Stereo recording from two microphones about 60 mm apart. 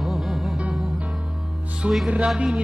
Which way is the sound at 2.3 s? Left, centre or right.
Centre.